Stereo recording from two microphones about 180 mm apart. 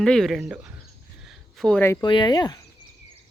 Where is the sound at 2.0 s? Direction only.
25° left (ahead or behind).